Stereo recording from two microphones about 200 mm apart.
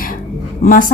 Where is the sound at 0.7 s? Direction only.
45° left (ahead or behind).